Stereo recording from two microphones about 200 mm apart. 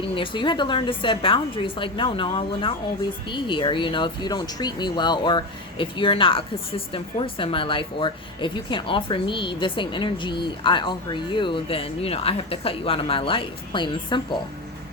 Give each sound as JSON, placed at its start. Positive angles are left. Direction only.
{"t": 0.2, "sound": "speech", "side_deg": 25}